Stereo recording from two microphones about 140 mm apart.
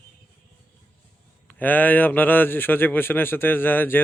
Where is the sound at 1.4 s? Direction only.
10° left (ahead or behind).